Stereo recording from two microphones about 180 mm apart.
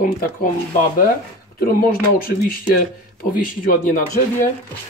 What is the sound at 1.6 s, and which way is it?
Speech, 55° left (ahead or behind).